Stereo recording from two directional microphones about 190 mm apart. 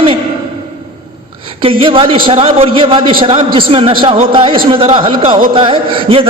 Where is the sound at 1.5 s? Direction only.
25° right (ahead or behind).